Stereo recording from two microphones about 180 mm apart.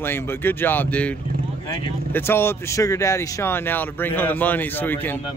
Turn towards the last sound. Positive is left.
turn(degrees=10)  # may be behind; listen again after turning